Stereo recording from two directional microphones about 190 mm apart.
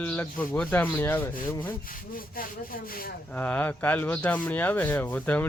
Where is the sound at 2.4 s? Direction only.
50° left (ahead or behind).